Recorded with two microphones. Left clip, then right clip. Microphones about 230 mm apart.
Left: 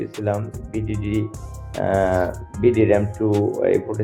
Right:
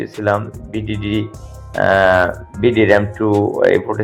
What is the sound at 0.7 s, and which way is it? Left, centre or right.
Speech, centre.